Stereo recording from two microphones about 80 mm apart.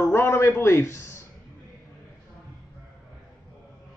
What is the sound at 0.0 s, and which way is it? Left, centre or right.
A man's voice, left.